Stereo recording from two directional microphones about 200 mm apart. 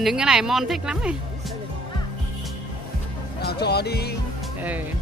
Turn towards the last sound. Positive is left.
turn(degrees=55)  # may be behind; listen again after turning